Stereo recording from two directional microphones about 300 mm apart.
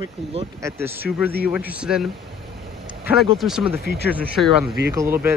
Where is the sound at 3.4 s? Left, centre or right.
Centre.